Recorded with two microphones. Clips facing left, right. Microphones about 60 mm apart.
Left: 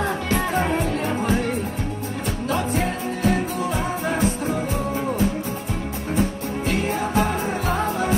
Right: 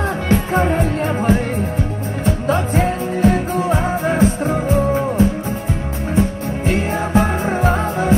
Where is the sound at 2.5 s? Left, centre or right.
Right.